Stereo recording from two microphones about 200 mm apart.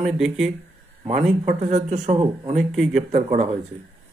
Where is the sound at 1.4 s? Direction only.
35° right (ahead or behind).